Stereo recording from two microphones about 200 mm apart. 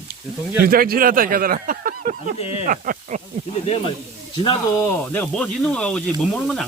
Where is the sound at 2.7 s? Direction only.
45° right (ahead or behind).